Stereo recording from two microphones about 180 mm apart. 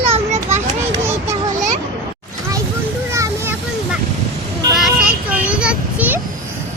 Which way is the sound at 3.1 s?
15° right (ahead or behind).